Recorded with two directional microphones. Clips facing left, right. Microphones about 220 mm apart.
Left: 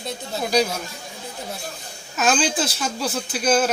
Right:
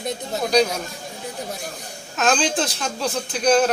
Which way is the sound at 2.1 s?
5° left (ahead or behind).